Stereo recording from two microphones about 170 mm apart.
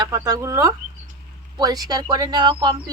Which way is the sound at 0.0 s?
20° right (ahead or behind).